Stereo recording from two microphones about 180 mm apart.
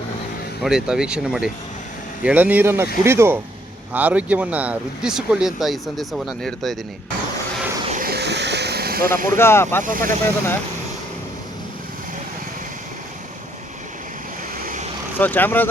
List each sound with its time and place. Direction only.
0.6 s speech: 5° right (ahead or behind)
7.9 s vehicle: 50° right (ahead or behind)
9.1 s speech: 50° right (ahead or behind)
9.4 s speech: 15° left (ahead or behind)
14.6 s vehicle: 45° right (ahead or behind)
15.2 s speech: 10° left (ahead or behind)